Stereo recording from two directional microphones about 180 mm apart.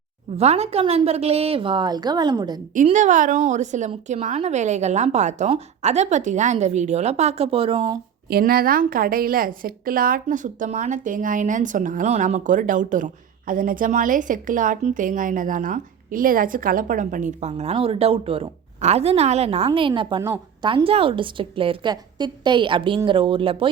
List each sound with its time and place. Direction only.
0.3 s a woman's voice: 35° right (ahead or behind)
2.7 s a woman's voice: 45° right (ahead or behind)
8.3 s a woman's voice: 55° right (ahead or behind); by 23.6 s 30° right (ahead or behind)